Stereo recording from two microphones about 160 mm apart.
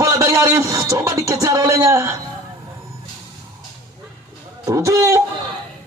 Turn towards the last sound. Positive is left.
turn(degrees=-20)  # may be behind; listen again after turning